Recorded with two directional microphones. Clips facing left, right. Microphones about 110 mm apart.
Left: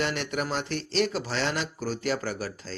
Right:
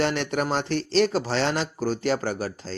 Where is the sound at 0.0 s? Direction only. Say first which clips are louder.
Right 5 dB; 35° right (ahead or behind).